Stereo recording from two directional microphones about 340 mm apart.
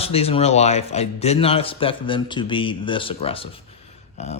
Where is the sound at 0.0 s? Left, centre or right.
Centre.